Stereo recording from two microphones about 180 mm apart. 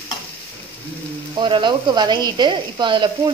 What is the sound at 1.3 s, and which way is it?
Speech, 25° right (ahead or behind).